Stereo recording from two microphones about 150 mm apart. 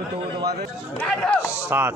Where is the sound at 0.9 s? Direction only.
5° left (ahead or behind).